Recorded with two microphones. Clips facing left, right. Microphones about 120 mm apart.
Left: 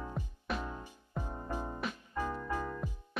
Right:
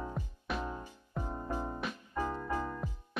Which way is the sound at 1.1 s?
15° right (ahead or behind).